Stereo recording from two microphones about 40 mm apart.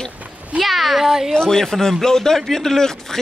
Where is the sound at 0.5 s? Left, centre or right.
Centre.